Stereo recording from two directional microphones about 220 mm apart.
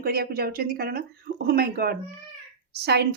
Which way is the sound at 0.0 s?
45° right (ahead or behind).